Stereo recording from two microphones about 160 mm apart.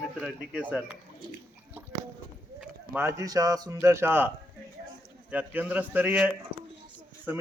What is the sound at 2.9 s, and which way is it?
Speech, 20° right (ahead or behind).